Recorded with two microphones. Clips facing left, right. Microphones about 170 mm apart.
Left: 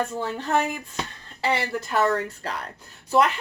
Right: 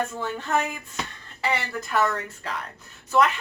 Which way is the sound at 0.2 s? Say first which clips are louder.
Left 2 dB; 30° left (ahead or behind).